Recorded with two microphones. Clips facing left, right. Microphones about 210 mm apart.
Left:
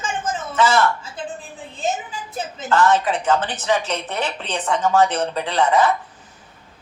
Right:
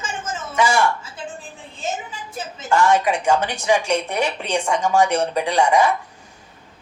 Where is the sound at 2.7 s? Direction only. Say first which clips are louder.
Even; 10° right (ahead or behind).